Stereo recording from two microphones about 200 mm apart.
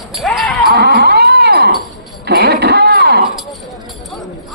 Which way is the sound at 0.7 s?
55° right (ahead or behind).